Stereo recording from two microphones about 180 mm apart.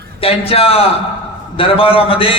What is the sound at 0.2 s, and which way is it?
A man's voice, 30° left (ahead or behind).